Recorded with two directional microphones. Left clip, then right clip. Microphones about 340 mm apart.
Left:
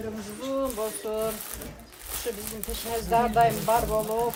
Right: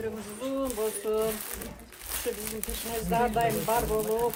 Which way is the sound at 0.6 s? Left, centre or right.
Centre.